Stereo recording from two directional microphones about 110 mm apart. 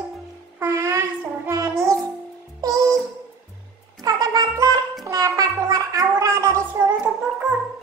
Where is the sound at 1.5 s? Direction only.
30° right (ahead or behind).